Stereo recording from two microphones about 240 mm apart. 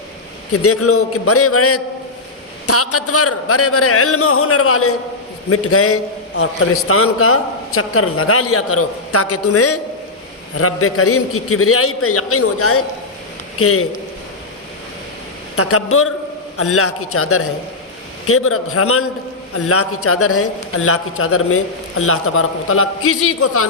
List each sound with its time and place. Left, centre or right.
0.5 s a man's voice: left
15.5 s a man's voice: left